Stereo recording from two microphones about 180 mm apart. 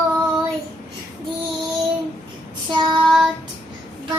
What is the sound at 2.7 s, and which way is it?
Child singing, 25° right (ahead or behind).